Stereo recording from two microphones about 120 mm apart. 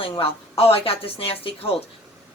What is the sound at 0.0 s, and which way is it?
A woman's voice, 55° left (ahead or behind).